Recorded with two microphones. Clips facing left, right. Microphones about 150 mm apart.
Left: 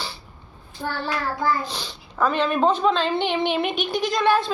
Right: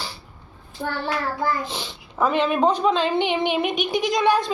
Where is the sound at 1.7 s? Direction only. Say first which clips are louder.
Right 1 dB; 20° right (ahead or behind).